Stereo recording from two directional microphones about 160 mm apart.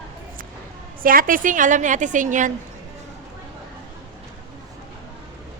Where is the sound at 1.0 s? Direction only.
60° right (ahead or behind).